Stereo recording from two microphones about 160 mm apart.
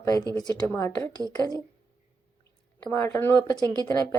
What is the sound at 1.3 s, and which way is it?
Speech, 25° left (ahead or behind).